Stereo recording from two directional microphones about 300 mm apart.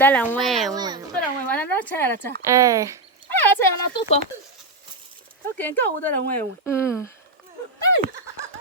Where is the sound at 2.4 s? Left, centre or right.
Centre.